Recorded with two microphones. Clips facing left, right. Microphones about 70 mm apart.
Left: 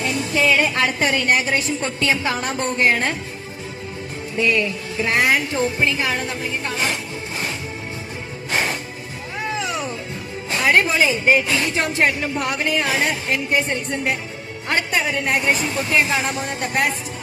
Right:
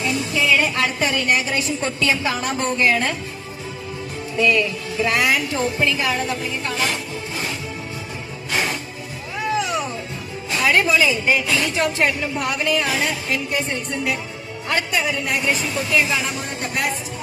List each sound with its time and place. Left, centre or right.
0.5 s a woman's voice: left
4.4 s a woman's voice: left
8.4 s music: left
10.5 s a woman's voice: left